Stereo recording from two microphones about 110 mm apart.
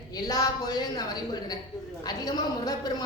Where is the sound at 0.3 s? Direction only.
35° left (ahead or behind).